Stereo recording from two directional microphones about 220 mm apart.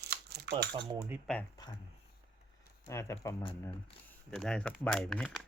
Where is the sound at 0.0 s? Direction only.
45° right (ahead or behind).